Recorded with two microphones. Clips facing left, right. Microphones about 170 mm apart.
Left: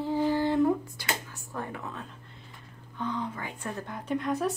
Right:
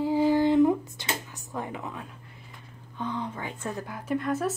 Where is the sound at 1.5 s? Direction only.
15° right (ahead or behind).